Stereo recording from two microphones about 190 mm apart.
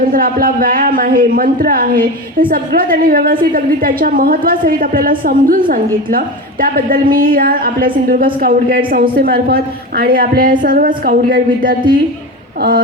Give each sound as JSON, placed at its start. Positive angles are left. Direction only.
{"t": 0.1, "sound": "a man's voice", "side_deg": -50}